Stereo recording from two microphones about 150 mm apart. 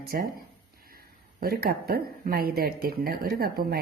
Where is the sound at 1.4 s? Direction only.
90° right.